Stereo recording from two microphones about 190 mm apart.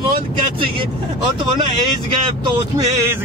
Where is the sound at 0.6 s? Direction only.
25° right (ahead or behind).